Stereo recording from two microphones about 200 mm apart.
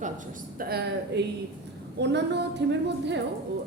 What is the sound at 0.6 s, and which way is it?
A woman's voice, 50° right (ahead or behind).